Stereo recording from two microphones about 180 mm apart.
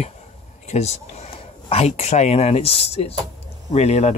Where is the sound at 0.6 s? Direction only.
40° left (ahead or behind).